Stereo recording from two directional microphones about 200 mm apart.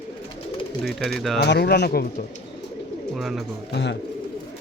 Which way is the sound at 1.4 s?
55° left (ahead or behind).